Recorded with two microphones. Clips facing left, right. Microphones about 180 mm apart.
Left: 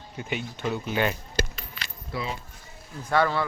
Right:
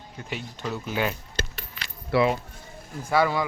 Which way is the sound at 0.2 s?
Centre (ahead or behind).